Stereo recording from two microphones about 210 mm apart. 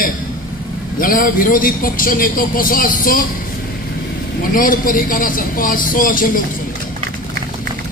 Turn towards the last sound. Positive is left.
turn(degrees=40)  # may be behind; listen again after turning